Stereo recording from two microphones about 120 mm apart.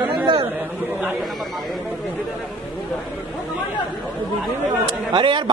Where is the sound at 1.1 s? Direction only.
Centre (ahead or behind).